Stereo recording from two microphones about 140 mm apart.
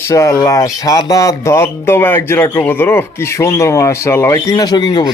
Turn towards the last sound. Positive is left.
turn(degrees=30)  # may be behind; listen again after turning